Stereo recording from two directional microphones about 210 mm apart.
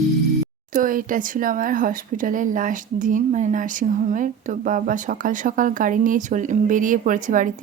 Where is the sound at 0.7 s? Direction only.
40° right (ahead or behind).